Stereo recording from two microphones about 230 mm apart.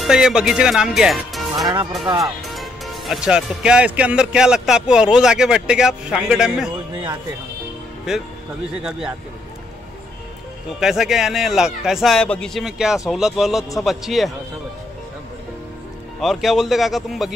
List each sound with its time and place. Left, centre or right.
0.0 s speech: centre
1.6 s speech: centre
2.4 s speech: centre
8.1 s speech: centre
10.8 s speech: centre
16.2 s speech: centre